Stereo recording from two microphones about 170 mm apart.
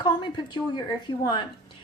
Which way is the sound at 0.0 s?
25° left (ahead or behind).